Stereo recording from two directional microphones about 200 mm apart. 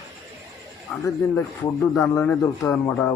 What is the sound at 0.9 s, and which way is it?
Speech, 10° left (ahead or behind).